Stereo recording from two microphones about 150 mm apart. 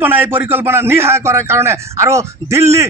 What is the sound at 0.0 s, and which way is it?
Speech, 15° right (ahead or behind).